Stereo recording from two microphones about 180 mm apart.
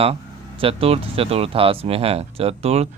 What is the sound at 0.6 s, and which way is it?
Speech, 30° right (ahead or behind).